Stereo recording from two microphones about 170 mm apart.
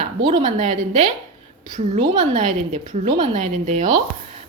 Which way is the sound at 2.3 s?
45° right (ahead or behind).